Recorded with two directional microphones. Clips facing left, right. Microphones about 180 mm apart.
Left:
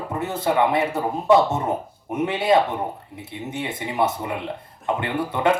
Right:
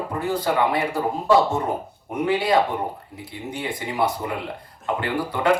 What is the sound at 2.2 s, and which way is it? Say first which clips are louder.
Speech: left 1 dB; 25° left (ahead or behind).